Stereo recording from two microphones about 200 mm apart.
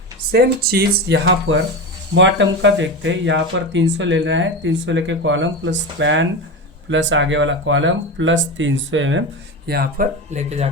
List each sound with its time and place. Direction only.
0.3 s speech: 50° right (ahead or behind); by 9.2 s 70° right (ahead or behind)
9.6 s speech: 50° right (ahead or behind)
10.3 s speech: 35° right (ahead or behind)